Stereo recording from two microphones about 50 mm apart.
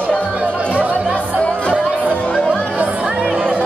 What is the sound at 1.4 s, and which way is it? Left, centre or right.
Music, left.